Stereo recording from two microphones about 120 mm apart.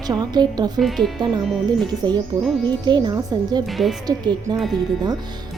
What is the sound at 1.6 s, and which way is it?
A woman's voice, 35° right (ahead or behind).